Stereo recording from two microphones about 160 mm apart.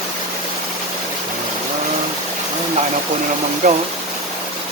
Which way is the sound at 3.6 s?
50° right (ahead or behind).